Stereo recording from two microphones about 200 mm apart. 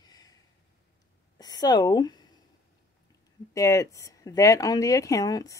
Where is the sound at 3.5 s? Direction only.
15° left (ahead or behind).